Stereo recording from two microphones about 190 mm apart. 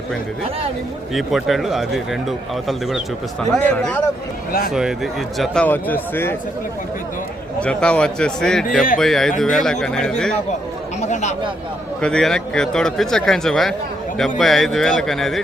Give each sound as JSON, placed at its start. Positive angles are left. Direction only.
{"t": 1.1, "sound": "a man's voice", "side_deg": 0}
{"t": 3.5, "sound": "a man's voice", "side_deg": 5}
{"t": 7.6, "sound": "a man's voice", "side_deg": 5}
{"t": 11.0, "sound": "speech", "side_deg": 35}
{"t": 12.0, "sound": "a man's voice", "side_deg": 5}